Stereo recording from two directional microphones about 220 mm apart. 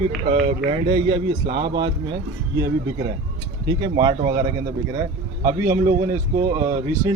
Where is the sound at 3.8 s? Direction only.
20° right (ahead or behind).